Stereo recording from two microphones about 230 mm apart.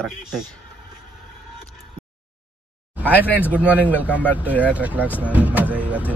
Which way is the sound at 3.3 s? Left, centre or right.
Centre.